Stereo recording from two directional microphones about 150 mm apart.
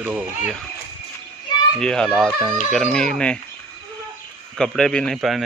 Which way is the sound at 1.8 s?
5° left (ahead or behind).